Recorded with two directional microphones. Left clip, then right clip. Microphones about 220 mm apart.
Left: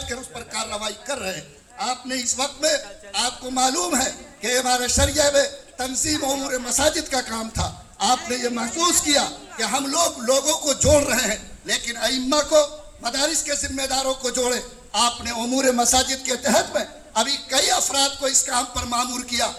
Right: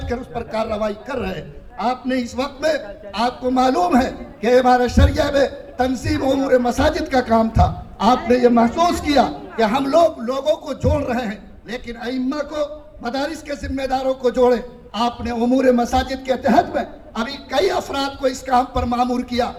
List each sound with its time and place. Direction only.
0.1 s a man's voice: 40° right (ahead or behind)